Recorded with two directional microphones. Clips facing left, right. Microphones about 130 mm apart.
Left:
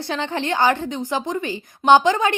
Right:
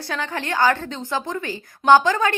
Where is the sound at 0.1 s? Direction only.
20° left (ahead or behind).